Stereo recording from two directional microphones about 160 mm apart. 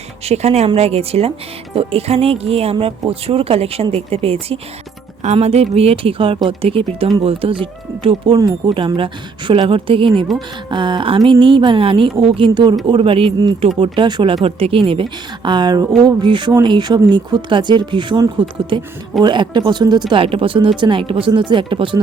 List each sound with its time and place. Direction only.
0.3 s speech: 40° right (ahead or behind)
10.3 s speech: centre (ahead or behind)
10.7 s speech: 30° right (ahead or behind)